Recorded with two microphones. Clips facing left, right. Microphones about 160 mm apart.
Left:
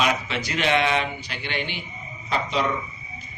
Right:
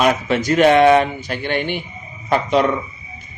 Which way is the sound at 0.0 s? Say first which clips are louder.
Right 8 dB; 50° right (ahead or behind).